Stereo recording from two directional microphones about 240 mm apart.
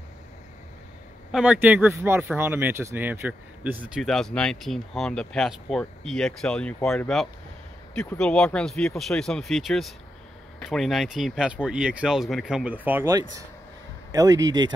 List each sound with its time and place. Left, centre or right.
1.3 s a man's voice: centre